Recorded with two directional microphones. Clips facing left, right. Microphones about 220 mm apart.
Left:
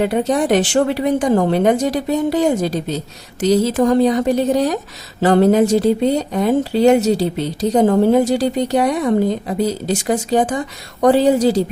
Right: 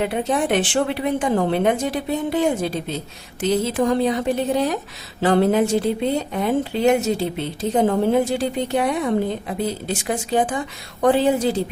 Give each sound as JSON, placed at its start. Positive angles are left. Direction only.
{"t": 0.0, "sound": "speech", "side_deg": 40}